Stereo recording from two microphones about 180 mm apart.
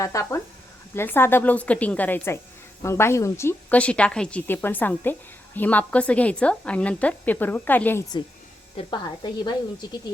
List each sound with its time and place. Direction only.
0.0 s a woman's voice: 15° left (ahead or behind)
8.7 s speech: 25° left (ahead or behind)